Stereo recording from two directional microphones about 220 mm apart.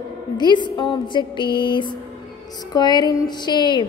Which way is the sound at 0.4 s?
20° left (ahead or behind).